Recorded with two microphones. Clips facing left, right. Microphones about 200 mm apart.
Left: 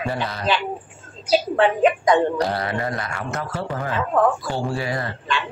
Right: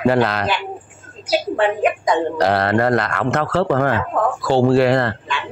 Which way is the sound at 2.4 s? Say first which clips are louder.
Right 7 dB; 75° right (ahead or behind).